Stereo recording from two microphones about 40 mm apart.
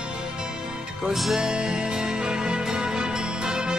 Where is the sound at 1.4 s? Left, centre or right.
Centre.